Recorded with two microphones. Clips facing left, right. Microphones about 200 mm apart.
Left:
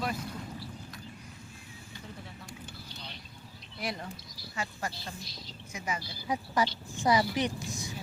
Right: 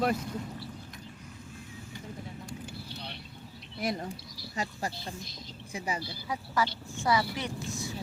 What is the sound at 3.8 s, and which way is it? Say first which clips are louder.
A woman's voice: right 4 dB; 45° right (ahead or behind).